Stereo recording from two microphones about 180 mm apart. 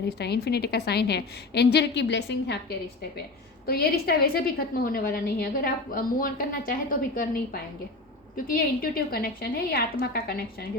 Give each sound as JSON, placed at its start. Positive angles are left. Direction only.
{"t": 0.0, "sound": "a woman's voice", "side_deg": 65}
{"t": 3.7, "sound": "a woman's voice", "side_deg": 55}
{"t": 8.4, "sound": "a woman's voice", "side_deg": 55}